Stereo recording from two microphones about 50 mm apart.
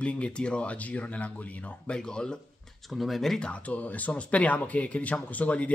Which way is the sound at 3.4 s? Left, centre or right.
Left.